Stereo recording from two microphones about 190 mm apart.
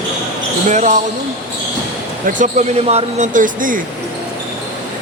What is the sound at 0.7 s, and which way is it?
Speech, 40° right (ahead or behind).